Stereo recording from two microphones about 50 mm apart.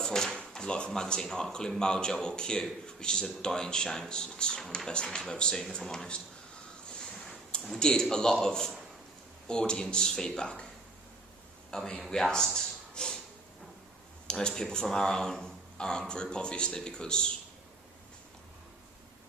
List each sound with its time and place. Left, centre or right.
0.0 s speech: centre
7.0 s a sound: centre
7.8 s speech: centre
11.7 s speech: centre
12.9 s a sound: centre
14.3 s speech: centre